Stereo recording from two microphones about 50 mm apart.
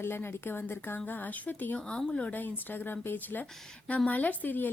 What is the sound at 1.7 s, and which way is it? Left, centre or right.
Speech, left.